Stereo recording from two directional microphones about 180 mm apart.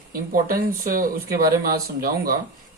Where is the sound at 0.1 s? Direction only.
55° right (ahead or behind).